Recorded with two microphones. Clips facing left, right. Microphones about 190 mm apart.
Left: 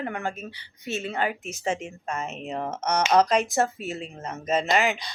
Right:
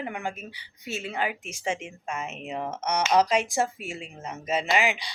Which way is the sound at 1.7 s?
35° left (ahead or behind).